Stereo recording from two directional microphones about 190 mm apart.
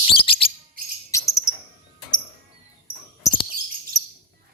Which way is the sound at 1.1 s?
15° left (ahead or behind).